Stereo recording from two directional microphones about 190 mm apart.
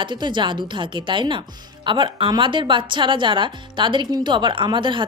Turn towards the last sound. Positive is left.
turn(degrees=-25)  # may be behind; listen again after turning